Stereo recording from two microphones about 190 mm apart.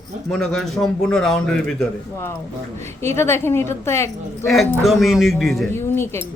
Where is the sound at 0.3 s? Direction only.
Centre (ahead or behind).